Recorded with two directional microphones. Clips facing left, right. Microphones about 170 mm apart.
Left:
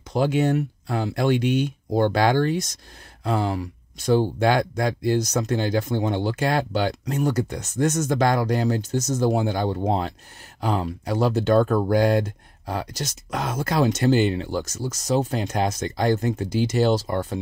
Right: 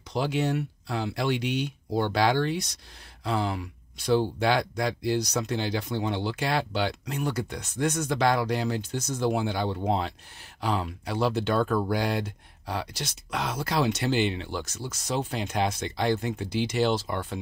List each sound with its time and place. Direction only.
0.1 s speech: 50° left (ahead or behind)